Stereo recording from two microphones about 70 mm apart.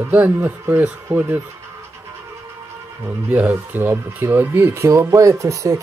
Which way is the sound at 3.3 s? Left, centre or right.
Right.